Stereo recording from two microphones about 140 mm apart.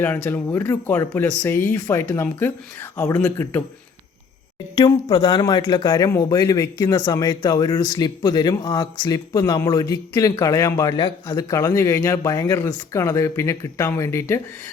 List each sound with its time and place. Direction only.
0.0 s speech: 15° left (ahead or behind)
4.7 s speech: 30° left (ahead or behind)